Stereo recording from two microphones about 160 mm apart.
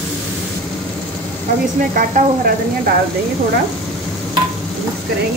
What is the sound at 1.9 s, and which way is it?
Speech, 60° right (ahead or behind).